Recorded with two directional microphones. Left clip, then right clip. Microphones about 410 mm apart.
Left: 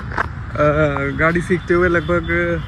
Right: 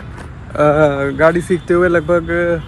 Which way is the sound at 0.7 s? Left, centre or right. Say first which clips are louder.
Right 5 dB; right.